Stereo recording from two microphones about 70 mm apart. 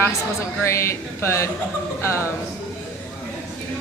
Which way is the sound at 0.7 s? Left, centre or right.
Left.